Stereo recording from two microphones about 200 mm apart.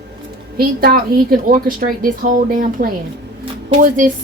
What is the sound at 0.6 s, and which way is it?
A woman's voice, 50° right (ahead or behind).